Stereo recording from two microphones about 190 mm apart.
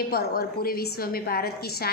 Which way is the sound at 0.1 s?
55° left (ahead or behind).